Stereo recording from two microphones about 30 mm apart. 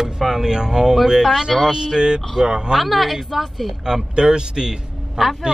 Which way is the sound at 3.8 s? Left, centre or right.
Right.